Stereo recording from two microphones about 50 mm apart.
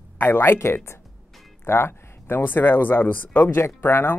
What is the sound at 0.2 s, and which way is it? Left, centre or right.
Speech, left.